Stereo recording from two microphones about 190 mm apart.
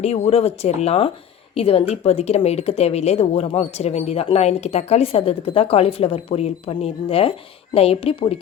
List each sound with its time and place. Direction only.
0.0 s speech: 35° left (ahead or behind)